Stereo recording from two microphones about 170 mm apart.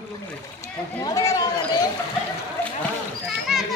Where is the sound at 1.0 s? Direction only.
20° left (ahead or behind).